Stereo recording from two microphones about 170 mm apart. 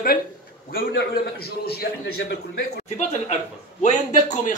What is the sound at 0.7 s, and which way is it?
A man's voice, 60° left (ahead or behind).